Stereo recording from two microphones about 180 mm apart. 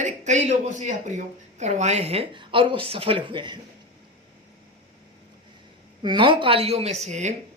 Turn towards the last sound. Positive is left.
turn(degrees=-40)  # may be behind; listen again after turning